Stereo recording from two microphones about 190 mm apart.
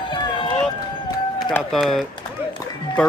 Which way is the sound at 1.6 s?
Centre (ahead or behind).